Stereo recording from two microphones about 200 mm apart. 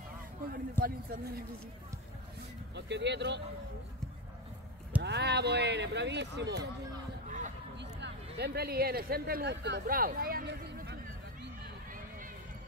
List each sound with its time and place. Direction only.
0.7 s a man's voice: 45° right (ahead or behind)
2.7 s speech: 60° right (ahead or behind)
5.0 s speech: 55° right (ahead or behind)
7.2 s a sound: 40° right (ahead or behind)
7.7 s speech: 60° right (ahead or behind)